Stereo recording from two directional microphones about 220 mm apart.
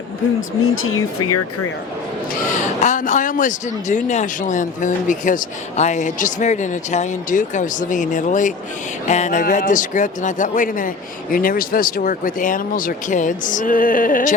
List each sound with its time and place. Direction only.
0.6 s speech: 70° left (ahead or behind); by 1.5 s 90° left
2.8 s speech: 35° left (ahead or behind)